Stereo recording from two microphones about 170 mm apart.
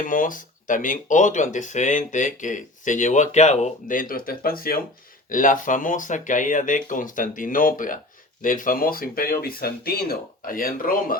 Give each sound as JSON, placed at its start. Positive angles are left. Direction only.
{"t": 0.0, "sound": "speech", "side_deg": 50}